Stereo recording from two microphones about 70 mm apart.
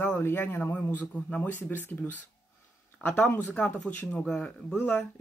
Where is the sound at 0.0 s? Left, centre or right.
Left.